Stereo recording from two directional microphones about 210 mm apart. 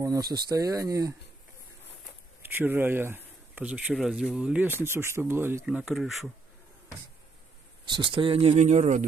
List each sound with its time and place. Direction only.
0.0 s speech: 15° right (ahead or behind)
2.4 s speech: 10° right (ahead or behind)
7.8 s speech: 20° right (ahead or behind)